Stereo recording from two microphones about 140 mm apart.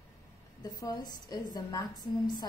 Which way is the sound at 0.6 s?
25° left (ahead or behind).